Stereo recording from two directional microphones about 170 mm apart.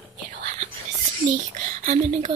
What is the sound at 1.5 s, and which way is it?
Speech, 45° right (ahead or behind).